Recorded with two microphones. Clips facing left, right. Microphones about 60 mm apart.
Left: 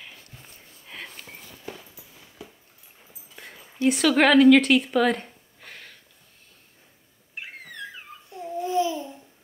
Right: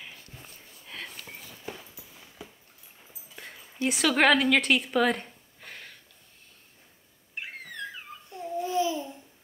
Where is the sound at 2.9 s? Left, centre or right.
Centre.